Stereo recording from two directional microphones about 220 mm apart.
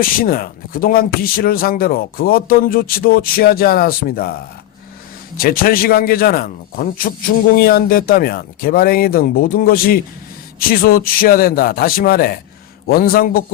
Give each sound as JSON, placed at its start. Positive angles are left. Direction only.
{"t": 0.0, "sound": "speech", "side_deg": 40}
{"t": 5.4, "sound": "speech", "side_deg": 40}